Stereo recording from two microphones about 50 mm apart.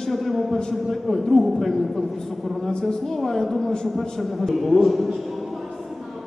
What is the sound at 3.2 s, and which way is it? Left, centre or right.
A man's voice, centre.